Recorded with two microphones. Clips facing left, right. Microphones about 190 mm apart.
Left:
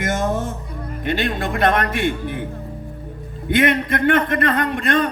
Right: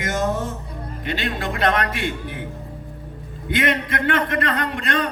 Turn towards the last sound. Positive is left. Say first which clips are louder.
# left 4 dB
turn(degrees=50)  # may be behind; listen again after turning